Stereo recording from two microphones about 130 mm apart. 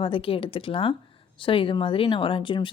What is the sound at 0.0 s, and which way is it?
A woman's voice, 45° left (ahead or behind).